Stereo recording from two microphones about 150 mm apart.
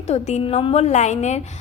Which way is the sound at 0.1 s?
45° left (ahead or behind).